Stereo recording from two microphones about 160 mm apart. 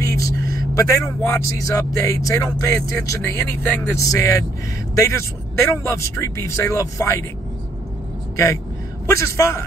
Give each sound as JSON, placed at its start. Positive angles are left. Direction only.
{"t": 0.0, "sound": "a sound", "side_deg": 20}
{"t": 0.7, "sound": "speech", "side_deg": 20}
{"t": 9.0, "sound": "speech", "side_deg": 15}